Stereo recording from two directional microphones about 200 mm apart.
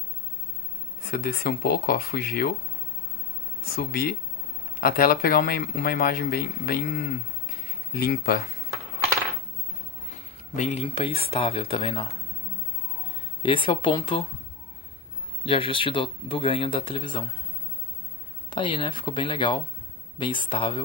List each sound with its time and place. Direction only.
1.1 s speech: 45° left (ahead or behind)
3.7 s speech: 50° left (ahead or behind)
10.5 s speech: 35° left (ahead or behind)
13.4 s speech: 25° left (ahead or behind)
15.4 s speech: 25° left (ahead or behind)
18.5 s speech: 25° left (ahead or behind)